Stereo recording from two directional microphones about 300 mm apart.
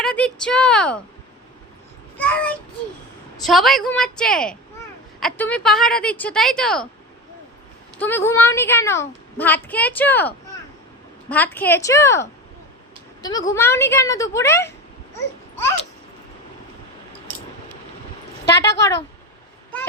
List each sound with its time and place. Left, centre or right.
0.0 s a woman's voice: centre
2.1 s a woman's voice: centre
7.9 s a woman's voice: centre
13.5 s a woman's voice: centre
18.4 s a woman's voice: left